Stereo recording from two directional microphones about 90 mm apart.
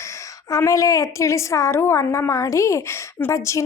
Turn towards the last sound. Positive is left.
turn(degrees=35)  # may be behind; listen again after turning